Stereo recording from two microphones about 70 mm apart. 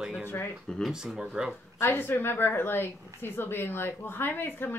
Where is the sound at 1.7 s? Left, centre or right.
Left.